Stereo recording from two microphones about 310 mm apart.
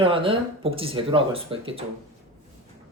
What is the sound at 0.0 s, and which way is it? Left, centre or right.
Speech, centre.